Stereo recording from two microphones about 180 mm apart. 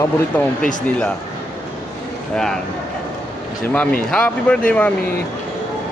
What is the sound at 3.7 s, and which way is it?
Speech, 5° left (ahead or behind).